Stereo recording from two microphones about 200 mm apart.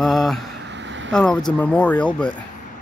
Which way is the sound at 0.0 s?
Centre (ahead or behind).